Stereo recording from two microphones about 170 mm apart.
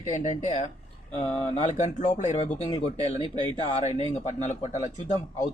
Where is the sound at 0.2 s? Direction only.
45° left (ahead or behind).